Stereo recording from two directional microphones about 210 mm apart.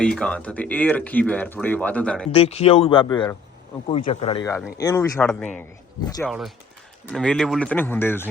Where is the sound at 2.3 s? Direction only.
30° left (ahead or behind).